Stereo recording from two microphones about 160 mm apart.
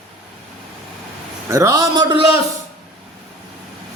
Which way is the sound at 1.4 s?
20° right (ahead or behind).